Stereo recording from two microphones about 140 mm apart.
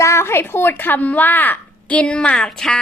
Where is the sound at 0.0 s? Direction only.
20° left (ahead or behind).